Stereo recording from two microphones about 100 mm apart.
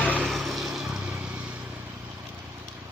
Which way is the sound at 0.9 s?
15° right (ahead or behind).